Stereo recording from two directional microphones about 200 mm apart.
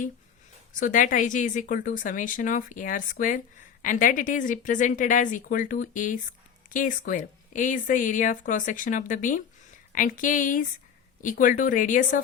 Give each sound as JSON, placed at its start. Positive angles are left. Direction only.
{"t": 0.8, "sound": "speech", "side_deg": 40}